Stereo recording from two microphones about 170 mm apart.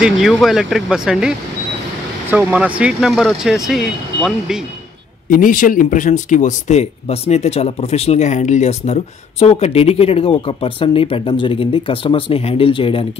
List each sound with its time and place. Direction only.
0.0 s speech: centre (ahead or behind)
2.3 s speech: 5° right (ahead or behind)
5.3 s speech: 50° left (ahead or behind); by 13.0 s 30° left (ahead or behind)